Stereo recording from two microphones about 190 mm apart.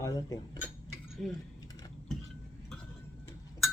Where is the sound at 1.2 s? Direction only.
Centre (ahead or behind).